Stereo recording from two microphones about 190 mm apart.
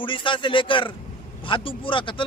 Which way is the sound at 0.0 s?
25° left (ahead or behind).